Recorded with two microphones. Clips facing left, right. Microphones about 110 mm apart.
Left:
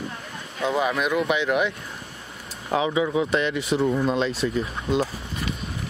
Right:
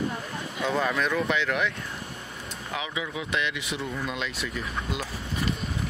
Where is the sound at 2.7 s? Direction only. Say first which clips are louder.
Left 11 dB; 35° left (ahead or behind).